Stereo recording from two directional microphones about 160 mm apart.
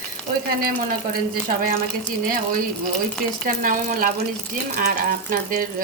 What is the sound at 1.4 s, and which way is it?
Speech, 60° right (ahead or behind).